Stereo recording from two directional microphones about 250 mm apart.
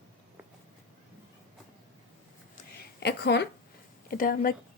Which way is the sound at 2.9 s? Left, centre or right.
Left.